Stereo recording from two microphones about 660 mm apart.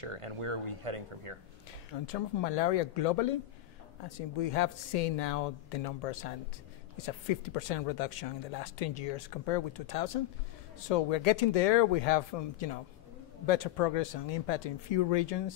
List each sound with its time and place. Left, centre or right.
0.0 s speech: right
2.0 s speech: left
4.4 s speech: left